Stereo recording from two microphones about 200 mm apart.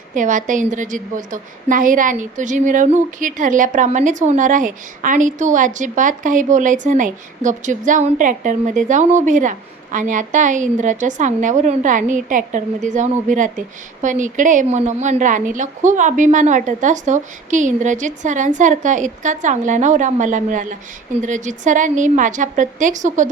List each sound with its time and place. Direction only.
0.1 s a woman's voice: 40° right (ahead or behind)